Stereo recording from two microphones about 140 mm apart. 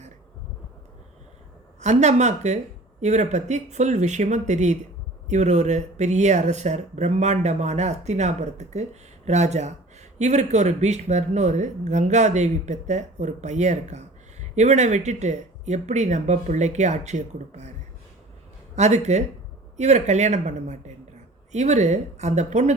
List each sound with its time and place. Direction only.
1.8 s speech: 55° right (ahead or behind)
18.8 s speech: 55° right (ahead or behind)